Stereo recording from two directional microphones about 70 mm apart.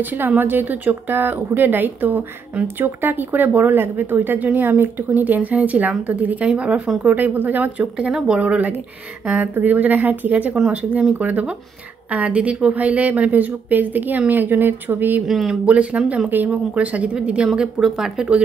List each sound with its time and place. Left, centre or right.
0.0 s speech: right
15.2 s speech: centre
15.6 s speech: centre
16.3 s speech: right; by 18.4 s centre